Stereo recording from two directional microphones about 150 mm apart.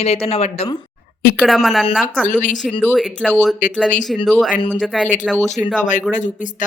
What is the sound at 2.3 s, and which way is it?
Speech, 60° left (ahead or behind).